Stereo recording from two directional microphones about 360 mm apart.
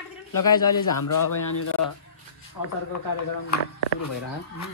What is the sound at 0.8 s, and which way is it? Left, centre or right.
Speech, left.